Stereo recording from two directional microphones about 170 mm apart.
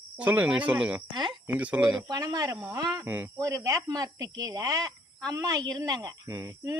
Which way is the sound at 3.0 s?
10° right (ahead or behind).